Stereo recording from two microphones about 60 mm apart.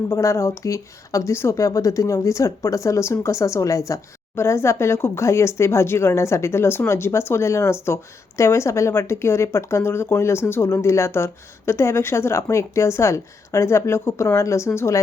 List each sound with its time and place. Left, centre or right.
0.1 s speech: left
4.4 s speech: left